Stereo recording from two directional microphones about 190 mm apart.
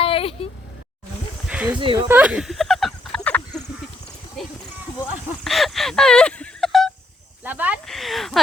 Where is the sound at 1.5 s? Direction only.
5° right (ahead or behind).